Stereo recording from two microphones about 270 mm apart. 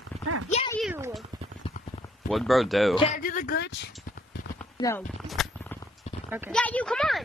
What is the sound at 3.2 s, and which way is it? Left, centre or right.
Speech, left.